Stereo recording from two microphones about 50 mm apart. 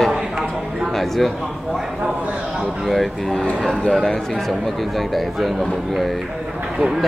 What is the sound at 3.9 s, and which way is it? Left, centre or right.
Speech, centre.